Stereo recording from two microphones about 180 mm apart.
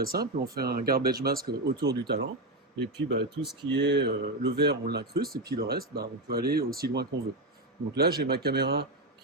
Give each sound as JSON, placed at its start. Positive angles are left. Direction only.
{"t": 0.0, "sound": "speech", "side_deg": -55}